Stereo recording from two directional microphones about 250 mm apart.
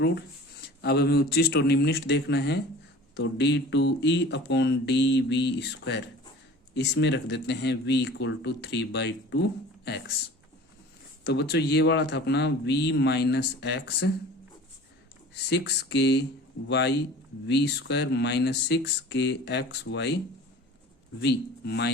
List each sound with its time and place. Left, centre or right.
0.8 s a man's voice: left
11.3 s a man's voice: left
15.4 s speech: left
21.2 s a man's voice: left